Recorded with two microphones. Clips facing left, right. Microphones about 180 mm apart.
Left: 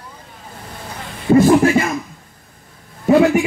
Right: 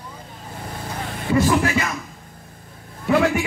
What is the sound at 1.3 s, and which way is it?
Chuckle, 45° left (ahead or behind).